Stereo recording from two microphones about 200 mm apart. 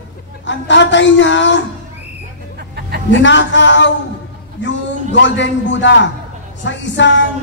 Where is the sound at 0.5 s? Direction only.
65° left (ahead or behind).